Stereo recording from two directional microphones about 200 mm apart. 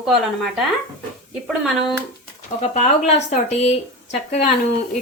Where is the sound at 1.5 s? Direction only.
Centre (ahead or behind).